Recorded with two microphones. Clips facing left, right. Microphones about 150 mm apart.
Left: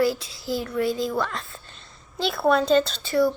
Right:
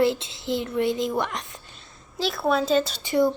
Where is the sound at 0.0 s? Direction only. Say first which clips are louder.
Right 1 dB; 25° right (ahead or behind).